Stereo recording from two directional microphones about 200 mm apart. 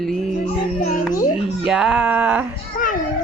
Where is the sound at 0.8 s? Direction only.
40° left (ahead or behind).